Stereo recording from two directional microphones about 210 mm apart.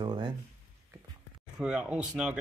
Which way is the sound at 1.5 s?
5° right (ahead or behind).